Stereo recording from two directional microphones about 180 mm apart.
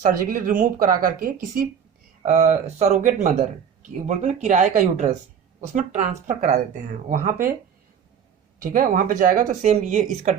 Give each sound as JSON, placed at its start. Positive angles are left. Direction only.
{"t": 0.0, "sound": "speech", "side_deg": -50}
{"t": 2.2, "sound": "speech", "side_deg": -40}
{"t": 8.5, "sound": "speech", "side_deg": -50}